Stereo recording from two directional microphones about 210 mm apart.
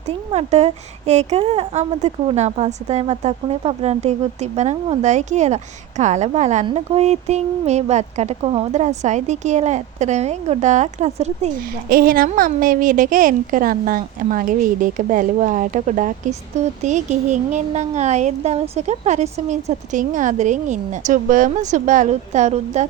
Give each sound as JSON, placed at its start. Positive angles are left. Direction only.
{"t": 0.3, "sound": "a woman's voice", "side_deg": -30}
{"t": 11.9, "sound": "a woman's voice", "side_deg": -45}